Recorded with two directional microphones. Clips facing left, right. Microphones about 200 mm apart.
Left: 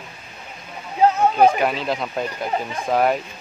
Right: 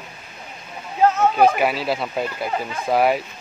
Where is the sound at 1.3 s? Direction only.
5° right (ahead or behind).